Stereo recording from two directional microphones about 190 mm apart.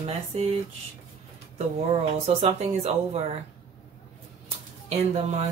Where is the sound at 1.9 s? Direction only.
35° right (ahead or behind).